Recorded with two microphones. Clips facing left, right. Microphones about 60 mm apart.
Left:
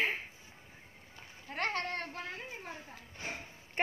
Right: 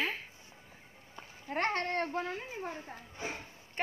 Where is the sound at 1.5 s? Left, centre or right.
Right.